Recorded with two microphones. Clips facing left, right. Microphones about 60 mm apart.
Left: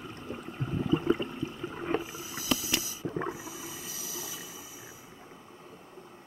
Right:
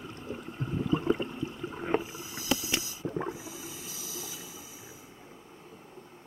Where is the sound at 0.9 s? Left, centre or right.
Centre.